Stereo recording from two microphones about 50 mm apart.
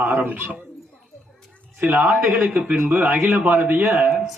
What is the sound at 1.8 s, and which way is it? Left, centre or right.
Speech, right.